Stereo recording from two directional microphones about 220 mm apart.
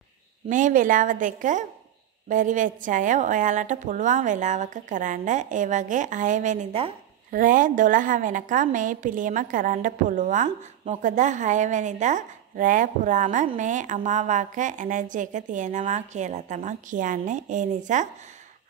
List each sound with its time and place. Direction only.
0.5 s a woman's voice: 35° right (ahead or behind)